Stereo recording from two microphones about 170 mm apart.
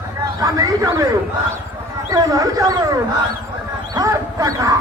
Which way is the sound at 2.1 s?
20° right (ahead or behind).